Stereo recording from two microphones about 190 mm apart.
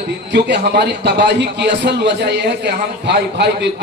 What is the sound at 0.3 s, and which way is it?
A man's voice, 65° right (ahead or behind).